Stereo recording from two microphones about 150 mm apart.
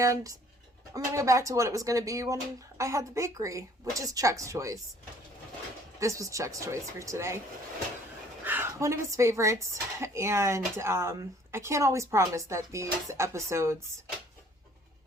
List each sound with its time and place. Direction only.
0.0 s speech: 20° right (ahead or behind)
6.0 s speech: 20° right (ahead or behind)
8.4 s speech: 15° right (ahead or behind)